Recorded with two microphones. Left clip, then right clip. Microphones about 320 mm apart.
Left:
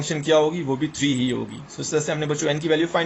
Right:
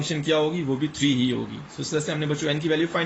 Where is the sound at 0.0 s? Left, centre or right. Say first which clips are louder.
Left 4 dB; centre.